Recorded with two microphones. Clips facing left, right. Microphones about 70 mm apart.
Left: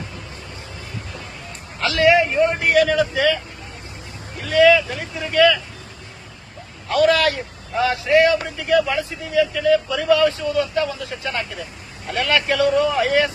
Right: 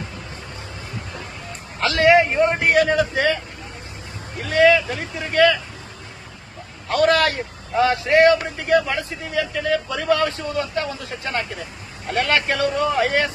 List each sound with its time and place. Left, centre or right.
1.8 s speech: right
4.4 s speech: right
6.8 s a man's voice: right